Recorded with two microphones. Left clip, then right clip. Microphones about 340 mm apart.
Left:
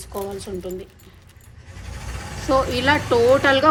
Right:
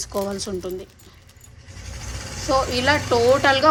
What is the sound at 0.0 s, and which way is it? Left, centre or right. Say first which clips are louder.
Speech: right 4 dB; centre.